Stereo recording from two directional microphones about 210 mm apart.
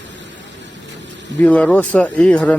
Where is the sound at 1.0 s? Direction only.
60° right (ahead or behind).